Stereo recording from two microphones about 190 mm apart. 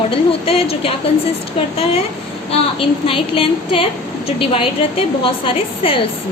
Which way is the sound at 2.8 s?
30° left (ahead or behind).